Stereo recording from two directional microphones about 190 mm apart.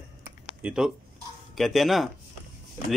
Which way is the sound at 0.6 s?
5° right (ahead or behind).